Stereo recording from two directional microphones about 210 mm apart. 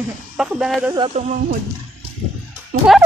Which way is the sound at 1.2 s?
35° right (ahead or behind).